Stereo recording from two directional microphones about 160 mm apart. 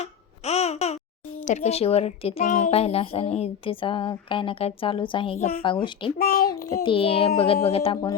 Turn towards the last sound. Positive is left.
turn(degrees=35)  # may be behind; listen again after turning